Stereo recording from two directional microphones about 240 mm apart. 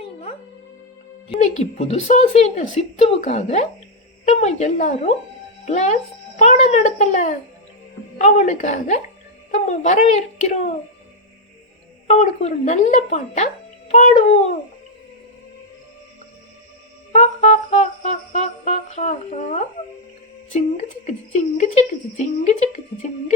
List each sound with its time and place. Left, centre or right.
0.0 s music: left
6.4 s a child's voice: left
8.2 s music: left
12.0 s music: left
17.1 s music: left
20.5 s a child's voice: left
21.3 s music: left